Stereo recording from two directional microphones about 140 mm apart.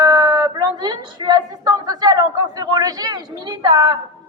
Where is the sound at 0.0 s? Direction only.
30° right (ahead or behind).